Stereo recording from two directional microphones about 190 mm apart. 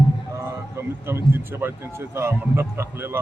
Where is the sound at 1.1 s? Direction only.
10° right (ahead or behind).